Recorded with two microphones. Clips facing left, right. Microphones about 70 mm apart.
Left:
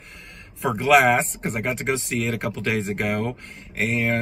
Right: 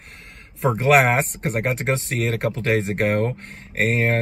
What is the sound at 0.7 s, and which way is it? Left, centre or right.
Speech, right.